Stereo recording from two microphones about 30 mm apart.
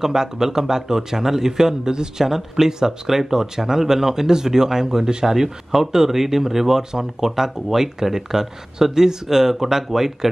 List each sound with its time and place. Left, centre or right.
0.0 s speech: centre